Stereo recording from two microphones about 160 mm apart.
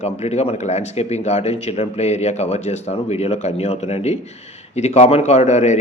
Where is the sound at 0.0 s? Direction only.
45° left (ahead or behind).